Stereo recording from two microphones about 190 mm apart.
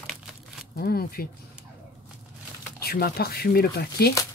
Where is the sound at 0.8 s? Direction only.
50° left (ahead or behind).